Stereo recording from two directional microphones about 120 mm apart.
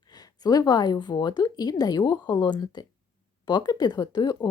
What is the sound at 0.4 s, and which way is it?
Speech, 30° left (ahead or behind).